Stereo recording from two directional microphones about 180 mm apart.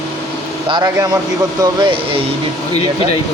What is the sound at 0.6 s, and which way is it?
Speech, 25° right (ahead or behind).